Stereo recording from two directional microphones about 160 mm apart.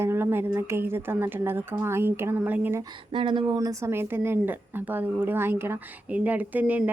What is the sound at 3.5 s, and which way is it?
Speech, 20° right (ahead or behind).